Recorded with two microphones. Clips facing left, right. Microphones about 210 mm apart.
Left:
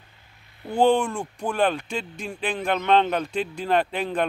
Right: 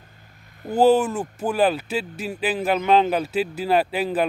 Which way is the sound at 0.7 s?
5° right (ahead or behind).